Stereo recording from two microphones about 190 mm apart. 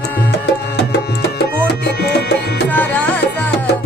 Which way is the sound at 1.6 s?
60° left (ahead or behind).